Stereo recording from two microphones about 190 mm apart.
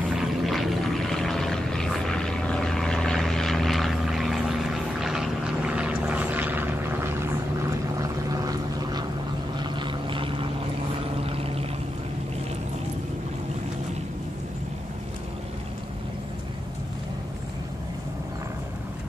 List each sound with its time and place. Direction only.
0.1 s vehicle: centre (ahead or behind)
8.0 s a sound: 20° right (ahead or behind)
9.6 s vehicle: 25° right (ahead or behind)
11.2 s pour: 30° right (ahead or behind)